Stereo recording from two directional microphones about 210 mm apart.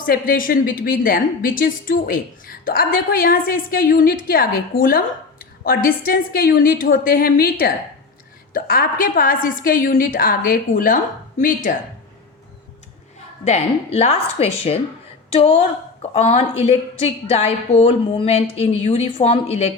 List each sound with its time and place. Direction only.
0.0 s a woman's voice: 40° left (ahead or behind)
13.4 s a woman's voice: 30° left (ahead or behind)